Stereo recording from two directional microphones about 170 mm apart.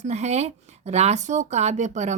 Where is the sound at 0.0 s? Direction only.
40° right (ahead or behind).